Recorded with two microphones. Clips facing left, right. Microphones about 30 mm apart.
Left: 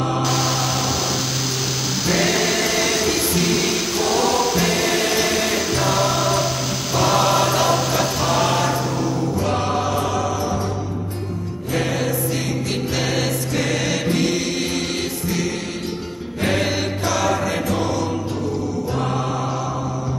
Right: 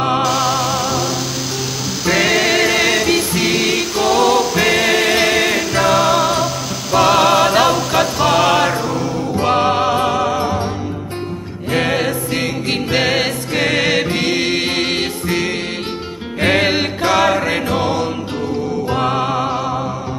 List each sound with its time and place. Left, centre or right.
0.2 s music: centre
2.0 s music: centre
9.4 s music: right
11.7 s music: right